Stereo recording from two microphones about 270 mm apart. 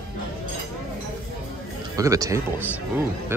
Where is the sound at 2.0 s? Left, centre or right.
Centre.